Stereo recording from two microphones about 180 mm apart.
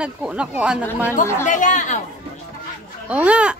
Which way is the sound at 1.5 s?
45° left (ahead or behind).